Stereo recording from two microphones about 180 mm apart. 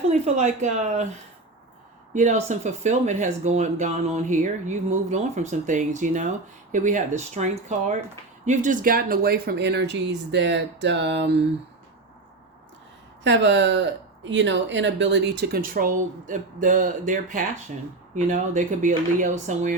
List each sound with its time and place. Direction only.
0.1 s speech: 40° right (ahead or behind)
2.1 s speech: 40° right (ahead or behind); by 11.4 s 75° right (ahead or behind)
13.2 s speech: 75° right (ahead or behind); by 19.7 s 45° right (ahead or behind)